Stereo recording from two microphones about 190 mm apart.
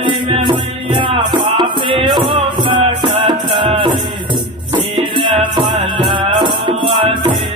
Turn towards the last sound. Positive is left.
turn(degrees=-25)  # may be behind; listen again after turning